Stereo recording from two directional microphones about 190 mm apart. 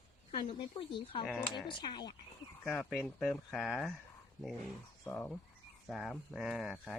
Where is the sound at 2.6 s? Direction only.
5° left (ahead or behind).